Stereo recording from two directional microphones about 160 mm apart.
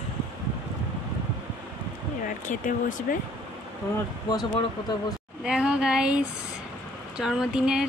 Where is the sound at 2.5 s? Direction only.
55° left (ahead or behind).